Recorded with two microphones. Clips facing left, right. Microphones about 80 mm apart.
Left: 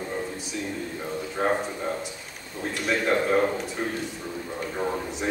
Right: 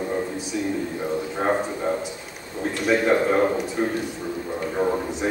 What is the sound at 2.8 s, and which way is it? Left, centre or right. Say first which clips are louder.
Speech: right 5 dB; centre.